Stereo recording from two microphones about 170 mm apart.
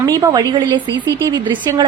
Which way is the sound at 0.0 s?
20° right (ahead or behind).